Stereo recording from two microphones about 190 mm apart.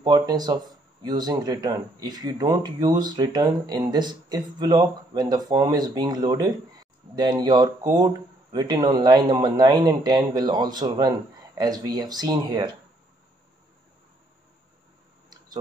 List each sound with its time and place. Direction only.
0.0 s speech: 20° right (ahead or behind)